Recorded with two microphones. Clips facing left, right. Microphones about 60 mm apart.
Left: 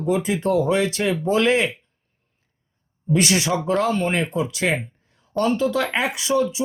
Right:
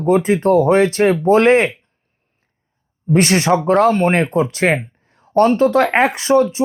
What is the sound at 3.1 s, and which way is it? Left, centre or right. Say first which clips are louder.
Speech: right 6 dB; right.